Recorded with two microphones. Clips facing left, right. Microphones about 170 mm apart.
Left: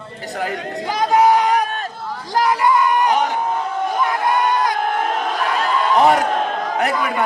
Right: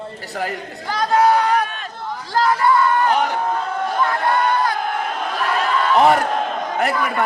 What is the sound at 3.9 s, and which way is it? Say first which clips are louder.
Crowd: even; 15° left (ahead or behind).